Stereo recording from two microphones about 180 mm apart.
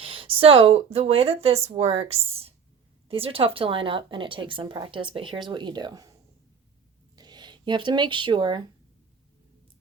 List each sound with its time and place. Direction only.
0.0 s speech: 30° right (ahead or behind)
7.2 s speech: 25° right (ahead or behind)